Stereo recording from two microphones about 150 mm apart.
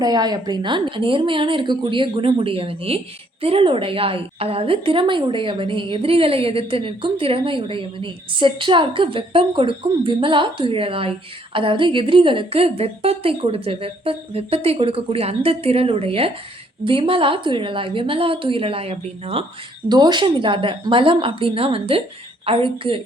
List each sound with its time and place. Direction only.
0.0 s a woman's voice: 25° right (ahead or behind)
19.9 s a woman's voice: 30° right (ahead or behind)